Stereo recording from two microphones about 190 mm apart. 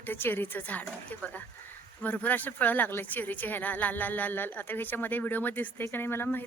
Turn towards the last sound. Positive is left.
turn(degrees=10)  # may be behind; listen again after turning